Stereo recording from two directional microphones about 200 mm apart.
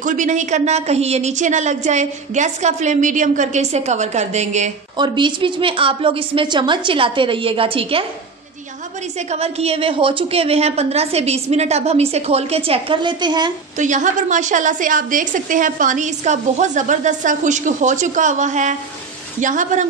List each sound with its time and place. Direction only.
0.0 s a woman's voice: 40° right (ahead or behind)
4.9 s a woman's voice: 20° right (ahead or behind)
9.3 s a woman's voice: 30° right (ahead or behind)
13.7 s a woman's voice: 40° right (ahead or behind)